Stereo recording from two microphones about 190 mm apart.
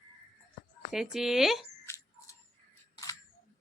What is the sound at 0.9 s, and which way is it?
Speech, centre (ahead or behind).